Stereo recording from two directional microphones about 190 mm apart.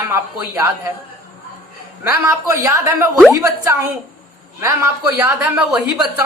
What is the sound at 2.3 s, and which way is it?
A man's voice, 15° right (ahead or behind).